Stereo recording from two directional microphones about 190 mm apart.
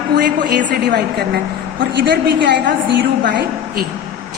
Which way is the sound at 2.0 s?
65° right (ahead or behind).